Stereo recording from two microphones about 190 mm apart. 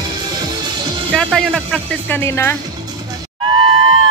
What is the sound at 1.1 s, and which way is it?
Speech, 5° left (ahead or behind).